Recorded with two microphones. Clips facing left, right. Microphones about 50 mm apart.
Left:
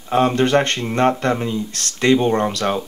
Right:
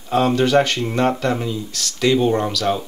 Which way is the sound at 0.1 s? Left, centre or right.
Left.